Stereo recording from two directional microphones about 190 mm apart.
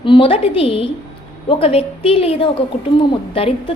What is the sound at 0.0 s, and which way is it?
A woman's voice, 25° left (ahead or behind).